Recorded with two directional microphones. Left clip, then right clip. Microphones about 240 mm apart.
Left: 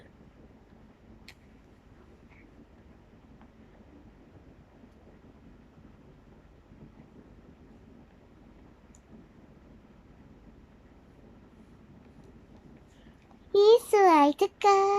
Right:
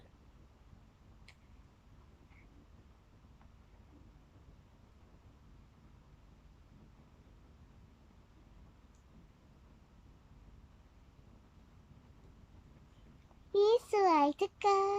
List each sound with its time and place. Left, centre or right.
13.5 s child singing: centre